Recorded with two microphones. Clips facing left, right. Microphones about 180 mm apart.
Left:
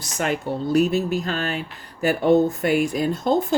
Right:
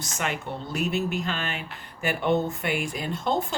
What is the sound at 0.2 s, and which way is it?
Speech, 40° left (ahead or behind).